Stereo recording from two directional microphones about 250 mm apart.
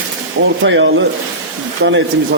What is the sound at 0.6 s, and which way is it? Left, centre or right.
A man's voice, right.